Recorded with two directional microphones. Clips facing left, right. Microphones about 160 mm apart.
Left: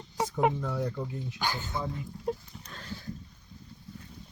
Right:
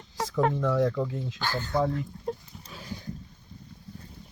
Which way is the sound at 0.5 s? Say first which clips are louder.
Right 8 dB; 90° right.